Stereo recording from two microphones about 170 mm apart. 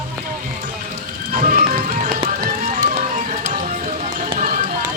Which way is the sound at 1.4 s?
55° right (ahead or behind).